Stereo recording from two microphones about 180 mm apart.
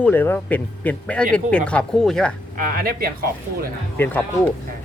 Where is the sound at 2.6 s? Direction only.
55° right (ahead or behind).